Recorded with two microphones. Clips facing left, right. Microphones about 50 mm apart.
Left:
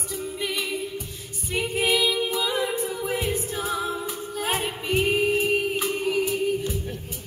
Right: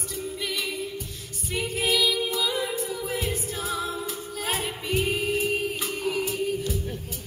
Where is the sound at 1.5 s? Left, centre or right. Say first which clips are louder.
Left 2 dB; centre.